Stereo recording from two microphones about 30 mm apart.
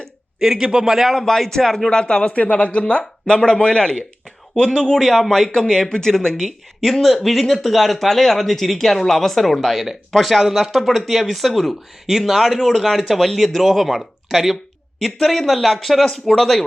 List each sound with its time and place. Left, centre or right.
0.3 s speech: centre
1.1 s speech: centre
1.9 s speech: left
2.3 s speech: left
5.1 s speech: centre
7.0 s speech: centre
7.9 s speech: centre
12.4 s speech: centre
12.9 s speech: centre
14.9 s speech: centre